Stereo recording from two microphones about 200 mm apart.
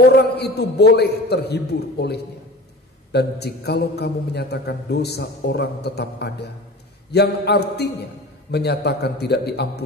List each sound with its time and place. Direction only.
0.1 s a man's voice: 55° left (ahead or behind)